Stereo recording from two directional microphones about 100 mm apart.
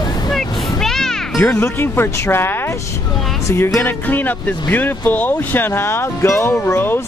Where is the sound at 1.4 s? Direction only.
25° left (ahead or behind).